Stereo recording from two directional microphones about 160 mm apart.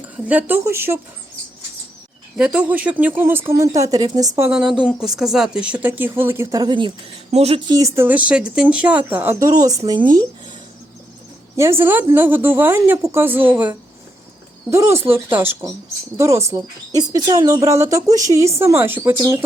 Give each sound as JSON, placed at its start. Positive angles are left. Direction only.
{"t": 0.3, "sound": "speech", "side_deg": -10}
{"t": 2.4, "sound": "speech", "side_deg": -10}
{"t": 4.5, "sound": "a woman's voice", "side_deg": -5}
{"t": 7.7, "sound": "speech", "side_deg": -20}
{"t": 11.5, "sound": "speech", "side_deg": -15}